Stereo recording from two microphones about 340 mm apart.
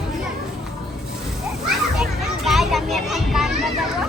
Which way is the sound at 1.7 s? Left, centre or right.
Centre.